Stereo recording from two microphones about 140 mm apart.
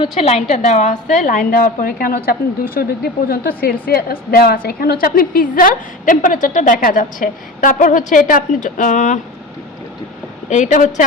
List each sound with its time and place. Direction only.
0.0 s a woman's voice: 45° left (ahead or behind)
10.5 s a woman's voice: 60° left (ahead or behind)